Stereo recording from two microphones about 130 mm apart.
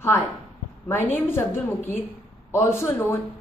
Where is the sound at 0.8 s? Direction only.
15° left (ahead or behind).